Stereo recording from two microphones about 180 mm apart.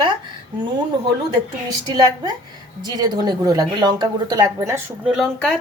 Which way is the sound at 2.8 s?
20° right (ahead or behind).